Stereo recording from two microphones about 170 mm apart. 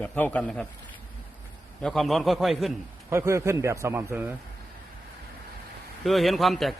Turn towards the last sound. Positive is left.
turn(degrees=0)  # may be behind; listen again after turning